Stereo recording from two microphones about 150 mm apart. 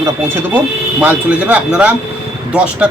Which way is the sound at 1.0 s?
10° right (ahead or behind).